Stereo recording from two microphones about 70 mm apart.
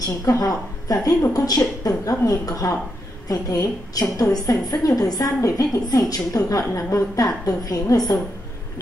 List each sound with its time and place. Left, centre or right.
0.0 s a woman's voice: left